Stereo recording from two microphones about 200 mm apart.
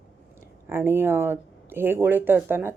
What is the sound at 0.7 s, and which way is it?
Speech, 10° right (ahead or behind).